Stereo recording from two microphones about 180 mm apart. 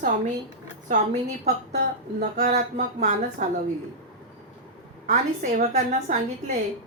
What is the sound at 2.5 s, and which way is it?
Speech, 40° right (ahead or behind).